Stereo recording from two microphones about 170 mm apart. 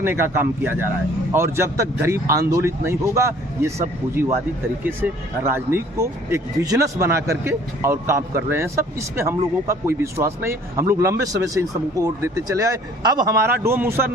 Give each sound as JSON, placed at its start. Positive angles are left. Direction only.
{"t": 0.0, "sound": "speech", "side_deg": -15}
{"t": 4.8, "sound": "speech", "side_deg": -15}